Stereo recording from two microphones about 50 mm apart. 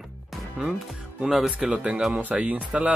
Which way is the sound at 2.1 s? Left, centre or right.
Right.